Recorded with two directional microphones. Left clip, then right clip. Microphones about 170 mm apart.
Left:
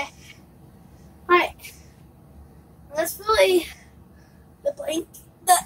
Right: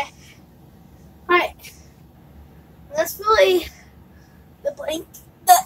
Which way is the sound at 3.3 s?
10° right (ahead or behind).